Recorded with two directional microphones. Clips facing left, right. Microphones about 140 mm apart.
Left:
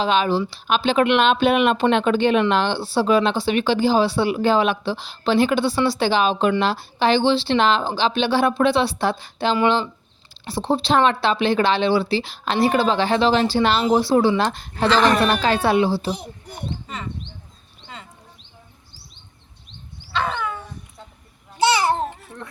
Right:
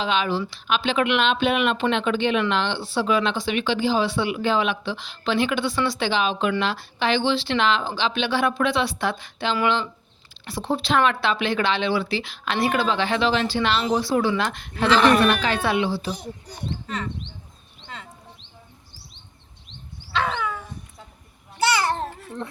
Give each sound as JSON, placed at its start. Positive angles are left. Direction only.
{"t": 0.0, "sound": "speech", "side_deg": 35}
{"t": 16.8, "sound": "speech", "side_deg": 5}
{"t": 20.1, "sound": "dog", "side_deg": 0}
{"t": 21.8, "sound": "babbling", "side_deg": 10}